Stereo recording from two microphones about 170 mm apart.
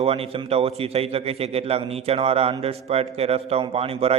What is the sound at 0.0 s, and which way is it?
A man's voice, 35° right (ahead or behind).